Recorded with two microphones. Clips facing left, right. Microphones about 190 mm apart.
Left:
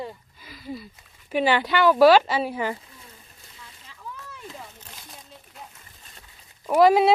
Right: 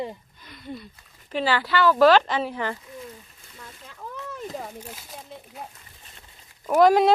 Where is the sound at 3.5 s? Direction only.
50° right (ahead or behind).